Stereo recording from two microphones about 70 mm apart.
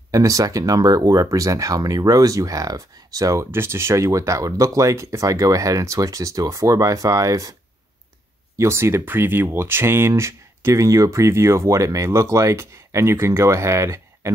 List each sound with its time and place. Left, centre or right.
0.1 s speech: right
3.5 s speech: right
8.5 s speech: right